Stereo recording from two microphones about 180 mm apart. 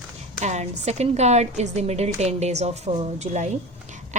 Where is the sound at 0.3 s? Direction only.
40° right (ahead or behind).